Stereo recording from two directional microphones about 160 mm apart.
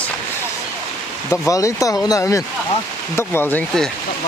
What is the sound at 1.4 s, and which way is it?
Speech, 20° left (ahead or behind).